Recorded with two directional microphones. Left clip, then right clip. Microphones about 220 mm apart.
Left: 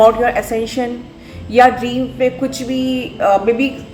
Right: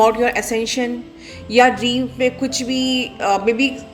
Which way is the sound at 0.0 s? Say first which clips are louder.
Left 4 dB; 45° right (ahead or behind).